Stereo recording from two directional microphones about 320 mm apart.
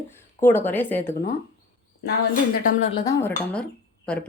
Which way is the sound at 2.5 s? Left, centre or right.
Left.